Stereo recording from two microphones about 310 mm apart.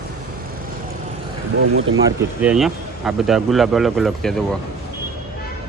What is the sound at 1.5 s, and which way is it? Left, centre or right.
Speech, right.